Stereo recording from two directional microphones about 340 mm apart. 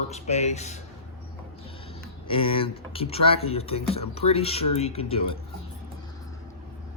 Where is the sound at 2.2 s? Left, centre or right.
Centre.